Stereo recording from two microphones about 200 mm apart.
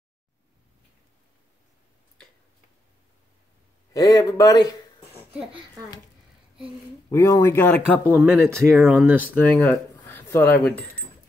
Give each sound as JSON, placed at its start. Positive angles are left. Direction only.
{"t": 3.9, "sound": "speech", "side_deg": 15}
{"t": 5.1, "sound": "a sound", "side_deg": -5}
{"t": 7.1, "sound": "speech", "side_deg": 15}
{"t": 8.1, "sound": "speech", "side_deg": -10}
{"t": 9.3, "sound": "speech", "side_deg": 10}